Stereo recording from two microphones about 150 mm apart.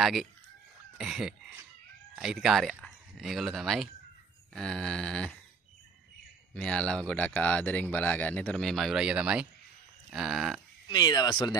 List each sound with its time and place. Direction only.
0.0 s speech: centre (ahead or behind)
6.5 s speech: 5° left (ahead or behind)
10.0 s a sound: 5° right (ahead or behind)
10.9 s speech: 25° left (ahead or behind)